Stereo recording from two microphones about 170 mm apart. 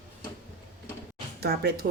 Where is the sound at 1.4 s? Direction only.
65° right (ahead or behind).